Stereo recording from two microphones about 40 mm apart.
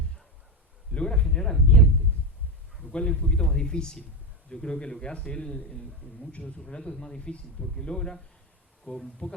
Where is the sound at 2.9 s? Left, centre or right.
Left.